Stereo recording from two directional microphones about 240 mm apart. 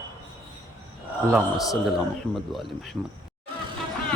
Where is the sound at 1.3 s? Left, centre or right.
Centre.